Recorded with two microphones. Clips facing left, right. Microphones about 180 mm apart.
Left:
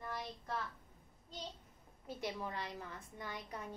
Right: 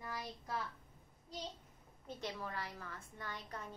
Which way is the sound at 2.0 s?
15° left (ahead or behind).